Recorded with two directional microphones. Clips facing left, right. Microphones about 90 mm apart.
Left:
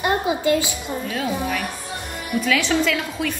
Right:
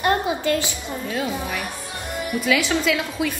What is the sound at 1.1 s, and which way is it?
A woman's voice, 5° right (ahead or behind).